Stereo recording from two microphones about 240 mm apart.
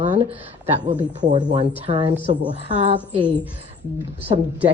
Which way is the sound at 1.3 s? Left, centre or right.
Right.